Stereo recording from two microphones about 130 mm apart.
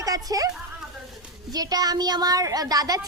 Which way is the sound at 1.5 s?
30° right (ahead or behind).